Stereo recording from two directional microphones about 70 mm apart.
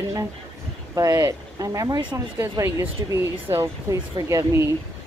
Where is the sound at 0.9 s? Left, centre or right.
Right.